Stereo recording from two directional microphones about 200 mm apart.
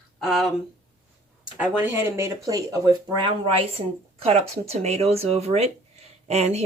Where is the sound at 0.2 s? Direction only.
Centre (ahead or behind).